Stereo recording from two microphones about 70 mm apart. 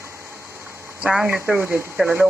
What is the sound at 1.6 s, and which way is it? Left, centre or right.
Speech, right.